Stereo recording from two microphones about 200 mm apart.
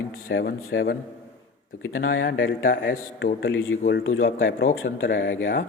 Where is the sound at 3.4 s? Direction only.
80° left.